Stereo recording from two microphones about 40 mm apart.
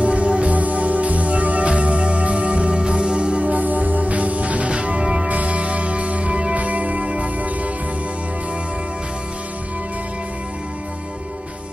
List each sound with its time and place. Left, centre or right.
0.0 s music: right